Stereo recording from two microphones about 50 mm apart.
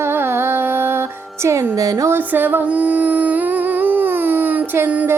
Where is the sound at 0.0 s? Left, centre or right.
Right.